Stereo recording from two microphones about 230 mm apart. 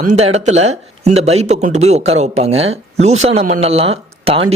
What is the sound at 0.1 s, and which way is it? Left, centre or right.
Speech, right.